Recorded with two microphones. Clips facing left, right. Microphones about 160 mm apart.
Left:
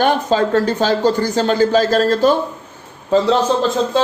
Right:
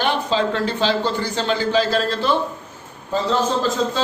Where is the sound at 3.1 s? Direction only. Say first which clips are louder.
Left 8 dB; 90° left.